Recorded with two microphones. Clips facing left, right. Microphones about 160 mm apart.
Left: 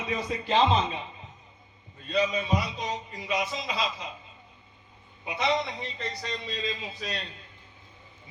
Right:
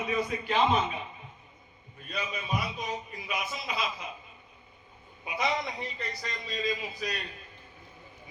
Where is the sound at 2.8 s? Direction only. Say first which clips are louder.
Left 2 dB; 25° left (ahead or behind).